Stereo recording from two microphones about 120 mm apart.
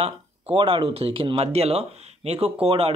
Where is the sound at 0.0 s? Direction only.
50° right (ahead or behind).